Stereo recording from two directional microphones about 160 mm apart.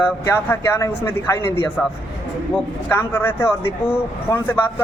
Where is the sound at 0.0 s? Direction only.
15° left (ahead or behind).